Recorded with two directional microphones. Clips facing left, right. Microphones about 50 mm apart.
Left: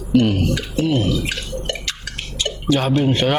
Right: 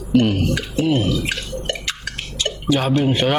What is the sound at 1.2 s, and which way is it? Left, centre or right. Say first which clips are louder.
Drip: right 1 dB; right.